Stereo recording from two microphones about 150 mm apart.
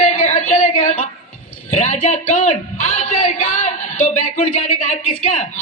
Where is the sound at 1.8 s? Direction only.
55° left (ahead or behind).